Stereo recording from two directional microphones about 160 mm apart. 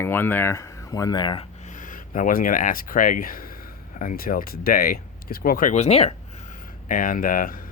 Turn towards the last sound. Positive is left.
turn(degrees=60)  # may be behind; listen again after turning